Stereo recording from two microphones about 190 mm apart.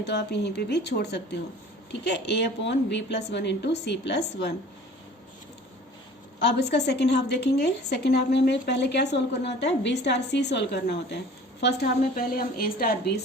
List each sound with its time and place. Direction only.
0.0 s a woman's voice: 60° left (ahead or behind)
6.4 s a woman's voice: 60° left (ahead or behind)